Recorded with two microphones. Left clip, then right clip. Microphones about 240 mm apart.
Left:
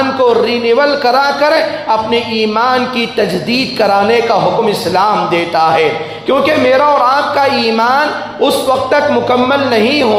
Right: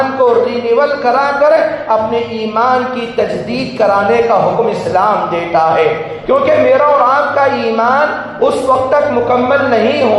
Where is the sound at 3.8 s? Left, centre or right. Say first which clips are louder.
Right 1 dB; left.